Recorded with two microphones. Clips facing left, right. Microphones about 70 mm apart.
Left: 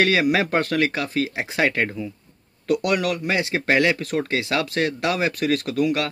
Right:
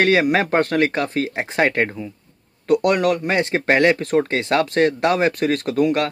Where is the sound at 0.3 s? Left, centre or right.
Right.